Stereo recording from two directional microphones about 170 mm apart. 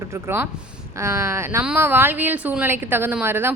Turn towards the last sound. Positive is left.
turn(degrees=-15)  # may be behind; listen again after turning